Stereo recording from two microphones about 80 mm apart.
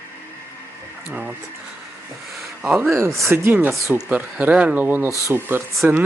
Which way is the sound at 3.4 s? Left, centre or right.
Right.